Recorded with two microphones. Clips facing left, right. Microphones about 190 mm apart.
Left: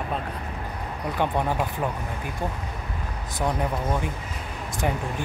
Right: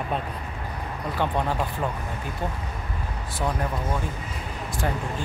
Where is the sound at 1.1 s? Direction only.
15° left (ahead or behind).